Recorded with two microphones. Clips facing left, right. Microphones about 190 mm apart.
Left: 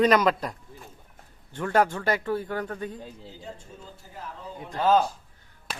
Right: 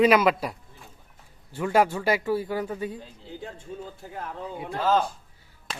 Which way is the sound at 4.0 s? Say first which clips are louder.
Right 5 dB; 55° right (ahead or behind).